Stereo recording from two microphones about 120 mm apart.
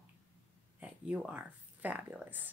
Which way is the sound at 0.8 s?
10° right (ahead or behind).